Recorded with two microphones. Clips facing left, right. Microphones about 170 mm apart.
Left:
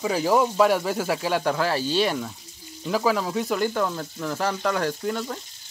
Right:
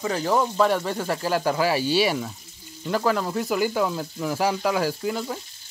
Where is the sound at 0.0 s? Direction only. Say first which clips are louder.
Left 2 dB; 5° left (ahead or behind).